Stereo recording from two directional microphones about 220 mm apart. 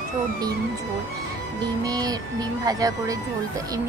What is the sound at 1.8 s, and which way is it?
Speech, 15° right (ahead or behind).